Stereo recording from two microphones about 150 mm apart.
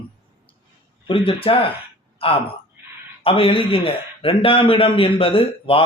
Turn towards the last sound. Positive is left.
turn(degrees=35)  # may be behind; listen again after turning